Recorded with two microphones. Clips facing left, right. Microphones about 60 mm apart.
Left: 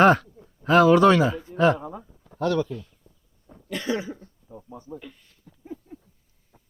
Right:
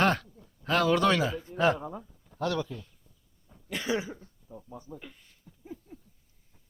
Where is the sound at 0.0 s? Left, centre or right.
Centre.